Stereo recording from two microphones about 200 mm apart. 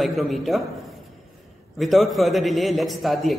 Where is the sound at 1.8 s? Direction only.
Centre (ahead or behind).